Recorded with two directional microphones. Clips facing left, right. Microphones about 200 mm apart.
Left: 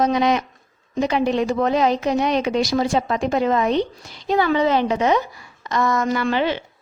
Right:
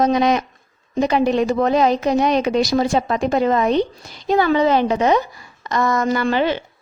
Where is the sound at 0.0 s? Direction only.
40° right (ahead or behind).